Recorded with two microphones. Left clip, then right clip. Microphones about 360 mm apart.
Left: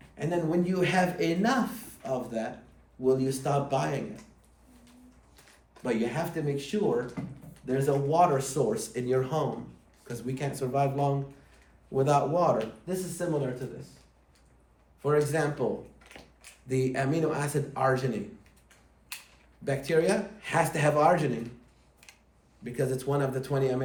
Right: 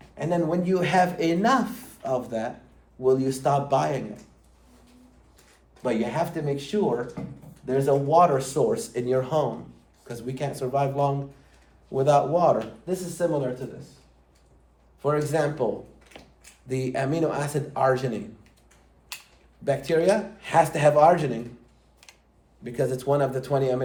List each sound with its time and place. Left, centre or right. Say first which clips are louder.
0.2 s speech: right 4 dB; centre
5.8 s speech: right 5 dB; centre
15.0 s speech: right 2 dB; centre
16.1 s a sound: right 4 dB; centre
16.6 s speech: right 2 dB; centre
19.1 s a sound: right 3 dB; centre
19.6 s speech: right 4 dB; centre
22.0 s a sound: right 2 dB; centre
22.6 s speech: right 5 dB; centre